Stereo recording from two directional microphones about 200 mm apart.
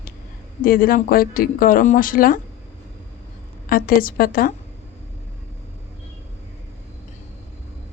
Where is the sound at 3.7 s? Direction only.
45° left (ahead or behind).